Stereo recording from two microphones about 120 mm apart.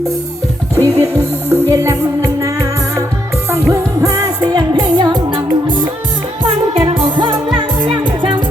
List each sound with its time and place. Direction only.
0.8 s music: 25° right (ahead or behind); by 8.4 s 40° right (ahead or behind)